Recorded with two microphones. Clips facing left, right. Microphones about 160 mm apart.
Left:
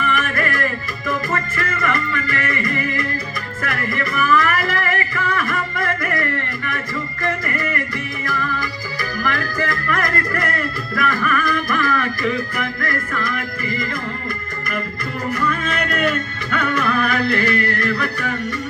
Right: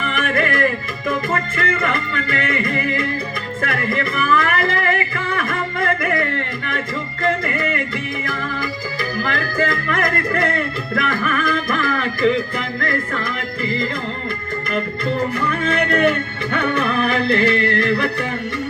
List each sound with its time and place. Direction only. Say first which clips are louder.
0.1 s music: right 2 dB; 25° right (ahead or behind)
15.3 s music: right 1 dB; 25° right (ahead or behind)